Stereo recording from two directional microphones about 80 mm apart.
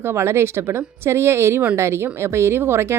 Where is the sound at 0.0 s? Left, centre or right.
Right.